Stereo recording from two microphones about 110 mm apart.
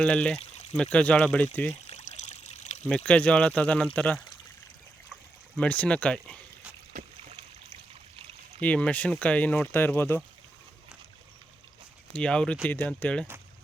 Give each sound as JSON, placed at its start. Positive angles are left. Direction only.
{"t": 0.0, "sound": "speech", "side_deg": 10}
{"t": 1.9, "sound": "trickle", "side_deg": 80}
{"t": 2.9, "sound": "speech", "side_deg": 10}
{"t": 5.5, "sound": "speech", "side_deg": 10}
{"t": 8.6, "sound": "speech", "side_deg": 10}
{"t": 12.1, "sound": "speech", "side_deg": 10}
{"t": 12.6, "sound": "speech", "side_deg": 20}